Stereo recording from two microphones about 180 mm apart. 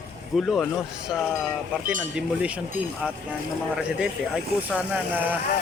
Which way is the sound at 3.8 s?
5° right (ahead or behind).